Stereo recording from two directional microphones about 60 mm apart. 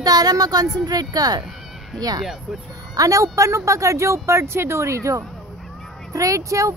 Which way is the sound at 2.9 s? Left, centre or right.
Right.